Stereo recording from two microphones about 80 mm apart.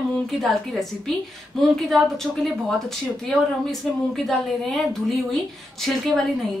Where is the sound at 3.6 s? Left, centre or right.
Centre.